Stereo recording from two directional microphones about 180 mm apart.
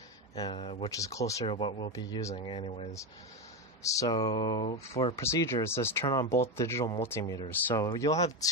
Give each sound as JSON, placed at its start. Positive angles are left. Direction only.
{"t": 0.3, "sound": "speech", "side_deg": 25}
{"t": 0.9, "sound": "speech", "side_deg": 20}
{"t": 1.4, "sound": "speech", "side_deg": 30}
{"t": 3.8, "sound": "speech", "side_deg": 20}
{"t": 5.1, "sound": "speech", "side_deg": 15}